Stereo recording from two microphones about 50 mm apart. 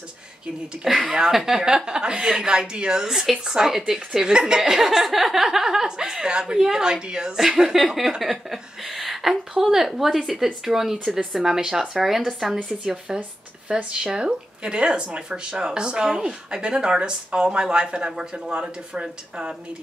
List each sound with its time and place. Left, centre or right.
0.8 s a woman's voice: centre